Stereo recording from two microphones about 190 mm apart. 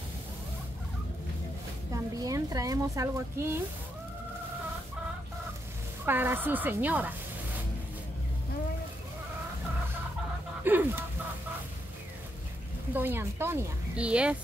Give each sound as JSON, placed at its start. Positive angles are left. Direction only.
{"t": 1.9, "sound": "a woman's voice", "side_deg": -20}
{"t": 6.0, "sound": "a woman's voice", "side_deg": -10}
{"t": 10.6, "sound": "chicken", "side_deg": -10}
{"t": 12.9, "sound": "a woman's voice", "side_deg": -10}